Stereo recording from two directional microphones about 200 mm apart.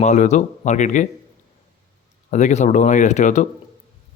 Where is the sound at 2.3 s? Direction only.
35° left (ahead or behind).